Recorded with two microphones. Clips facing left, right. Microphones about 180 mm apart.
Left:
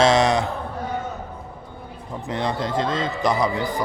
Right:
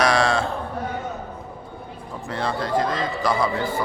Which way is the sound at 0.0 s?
20° left (ahead or behind).